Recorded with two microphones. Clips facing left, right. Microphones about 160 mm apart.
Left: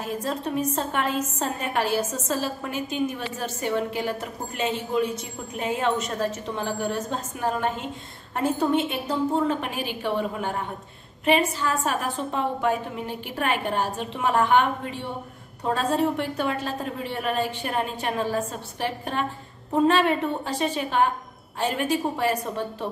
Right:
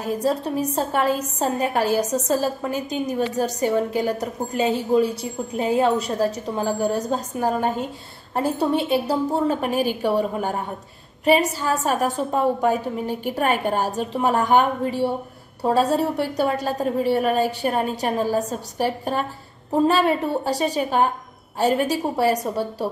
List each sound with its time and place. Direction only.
0.0 s a woman's voice: 35° right (ahead or behind)